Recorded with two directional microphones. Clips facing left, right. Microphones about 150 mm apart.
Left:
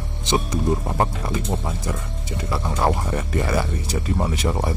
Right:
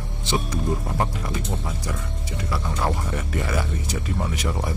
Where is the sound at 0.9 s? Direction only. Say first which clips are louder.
Left 3 dB; 35° left (ahead or behind).